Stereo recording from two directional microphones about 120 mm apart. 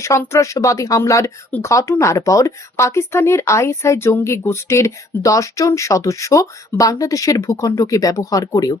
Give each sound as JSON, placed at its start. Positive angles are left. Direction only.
{"t": 0.0, "sound": "speech", "side_deg": 25}